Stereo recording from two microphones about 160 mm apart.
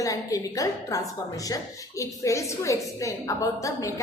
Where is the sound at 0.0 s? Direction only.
20° left (ahead or behind).